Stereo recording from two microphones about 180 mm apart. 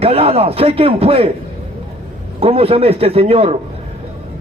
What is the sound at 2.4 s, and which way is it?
A man's voice, 30° right (ahead or behind).